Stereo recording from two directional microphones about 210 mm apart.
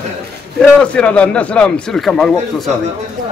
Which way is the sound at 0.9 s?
5° left (ahead or behind).